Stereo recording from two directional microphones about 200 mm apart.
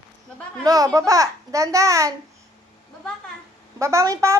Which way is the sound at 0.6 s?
15° right (ahead or behind).